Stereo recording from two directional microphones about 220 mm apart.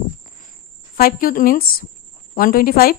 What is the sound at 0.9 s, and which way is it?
A woman's voice, 40° left (ahead or behind).